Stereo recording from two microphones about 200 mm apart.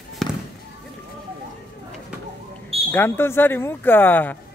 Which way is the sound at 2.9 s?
10° left (ahead or behind).